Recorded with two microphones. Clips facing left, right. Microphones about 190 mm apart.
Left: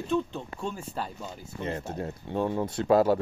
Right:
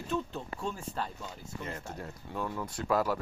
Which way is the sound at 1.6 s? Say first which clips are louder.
Left 8 dB; 25° left (ahead or behind).